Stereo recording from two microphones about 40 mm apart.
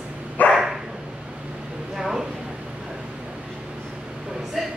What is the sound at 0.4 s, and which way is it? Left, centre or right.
Dog, left.